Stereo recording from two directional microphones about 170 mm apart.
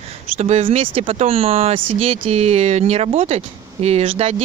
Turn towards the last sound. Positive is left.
turn(degrees=-35)  # may be behind; listen again after turning